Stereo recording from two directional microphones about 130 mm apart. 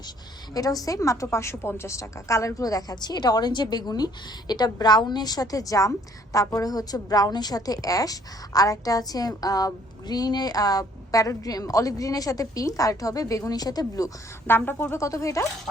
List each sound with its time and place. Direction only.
0.5 s a woman's voice: 30° left (ahead or behind)
14.4 s a woman's voice: 15° left (ahead or behind)